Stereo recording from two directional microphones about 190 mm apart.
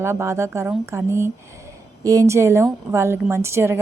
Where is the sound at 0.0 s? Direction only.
15° right (ahead or behind).